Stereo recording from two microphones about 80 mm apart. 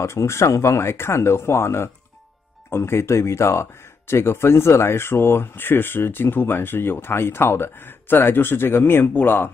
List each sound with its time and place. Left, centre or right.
0.0 s speech: left